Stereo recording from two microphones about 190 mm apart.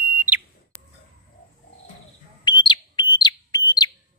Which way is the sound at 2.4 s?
25° left (ahead or behind).